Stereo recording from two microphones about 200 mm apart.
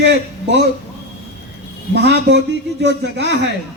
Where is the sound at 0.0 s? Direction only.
60° right (ahead or behind).